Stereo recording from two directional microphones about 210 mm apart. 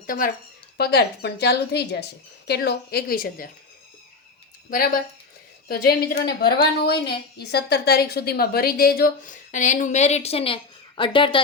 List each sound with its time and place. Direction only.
0.8 s a woman's voice: 50° left (ahead or behind)
5.6 s a woman's voice: 45° left (ahead or behind); by 11.3 s 25° left (ahead or behind)